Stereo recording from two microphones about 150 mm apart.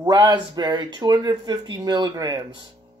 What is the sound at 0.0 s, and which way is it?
Speech, 30° right (ahead or behind).